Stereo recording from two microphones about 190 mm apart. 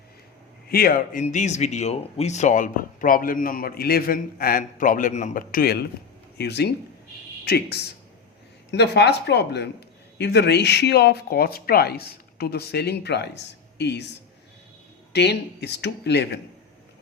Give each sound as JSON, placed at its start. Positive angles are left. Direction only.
{"t": 0.7, "sound": "speech", "side_deg": 50}
{"t": 1.2, "sound": "speech", "side_deg": 40}
{"t": 15.1, "sound": "speech", "side_deg": 60}